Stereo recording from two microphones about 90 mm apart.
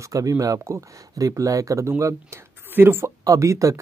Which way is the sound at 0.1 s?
40° right (ahead or behind).